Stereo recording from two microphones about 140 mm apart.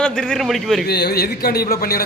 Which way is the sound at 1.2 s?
90° left.